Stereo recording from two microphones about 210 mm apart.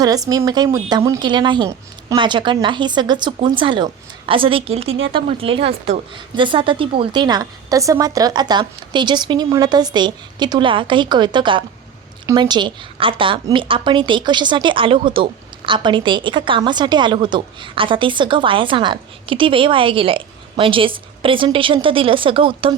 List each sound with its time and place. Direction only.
0.0 s a woman's voice: 15° right (ahead or behind)